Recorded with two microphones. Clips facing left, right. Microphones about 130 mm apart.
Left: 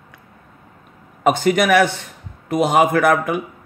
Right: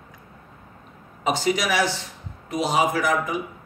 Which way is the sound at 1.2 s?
55° left (ahead or behind).